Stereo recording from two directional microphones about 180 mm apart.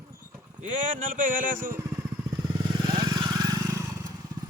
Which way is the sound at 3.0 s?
20° right (ahead or behind).